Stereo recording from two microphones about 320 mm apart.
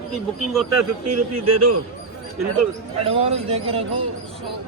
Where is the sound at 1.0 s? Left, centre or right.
Right.